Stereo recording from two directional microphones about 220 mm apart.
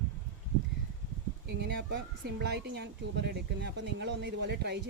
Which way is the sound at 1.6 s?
50° right (ahead or behind).